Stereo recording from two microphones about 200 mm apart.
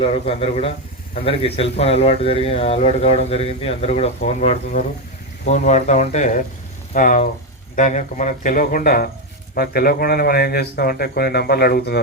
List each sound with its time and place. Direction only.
0.0 s speech: 30° left (ahead or behind); by 11.9 s 50° left (ahead or behind)